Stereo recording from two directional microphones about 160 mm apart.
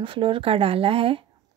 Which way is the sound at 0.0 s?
30° right (ahead or behind).